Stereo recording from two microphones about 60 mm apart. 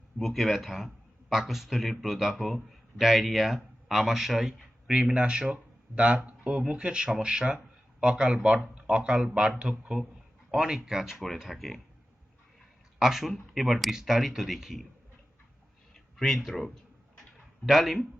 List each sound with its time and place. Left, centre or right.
0.2 s a man's voice: centre
13.0 s speech: centre
16.1 s speech: centre